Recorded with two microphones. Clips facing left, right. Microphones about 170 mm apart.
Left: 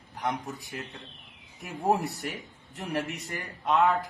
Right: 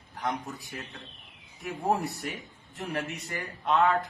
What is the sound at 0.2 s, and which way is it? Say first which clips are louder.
Speech: left 1 dB; centre (ahead or behind).